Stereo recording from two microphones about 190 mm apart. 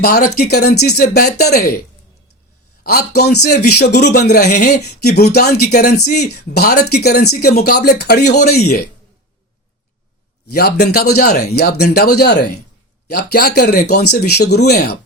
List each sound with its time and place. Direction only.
0.0 s a man's voice: 55° left (ahead or behind)
2.8 s a man's voice: 55° left (ahead or behind)
10.5 s a man's voice: 55° left (ahead or behind)